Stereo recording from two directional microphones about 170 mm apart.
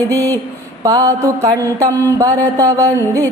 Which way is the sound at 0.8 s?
20° right (ahead or behind).